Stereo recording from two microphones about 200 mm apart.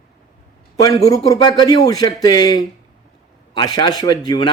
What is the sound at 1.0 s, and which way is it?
A man's voice, 15° left (ahead or behind).